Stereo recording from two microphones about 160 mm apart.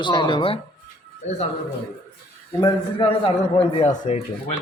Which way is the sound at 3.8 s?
45° left (ahead or behind).